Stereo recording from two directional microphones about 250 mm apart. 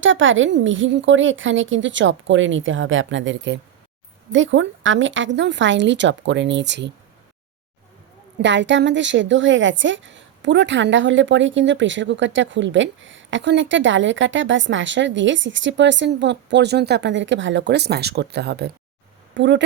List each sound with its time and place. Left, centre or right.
0.0 s a woman's voice: right
8.4 s a woman's voice: right